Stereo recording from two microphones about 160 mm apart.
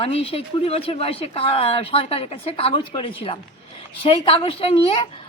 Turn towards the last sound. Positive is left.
turn(degrees=35)  # may be behind; listen again after turning